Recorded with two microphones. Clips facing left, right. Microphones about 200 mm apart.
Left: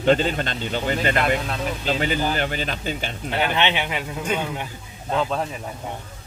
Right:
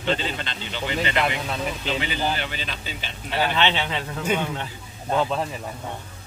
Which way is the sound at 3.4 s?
15° left (ahead or behind).